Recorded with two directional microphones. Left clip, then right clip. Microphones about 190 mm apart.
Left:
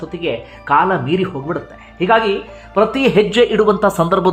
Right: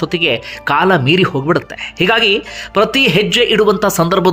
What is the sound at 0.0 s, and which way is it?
Speech, 20° right (ahead or behind).